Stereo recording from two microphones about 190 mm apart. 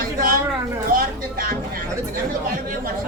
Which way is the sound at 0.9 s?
50° right (ahead or behind).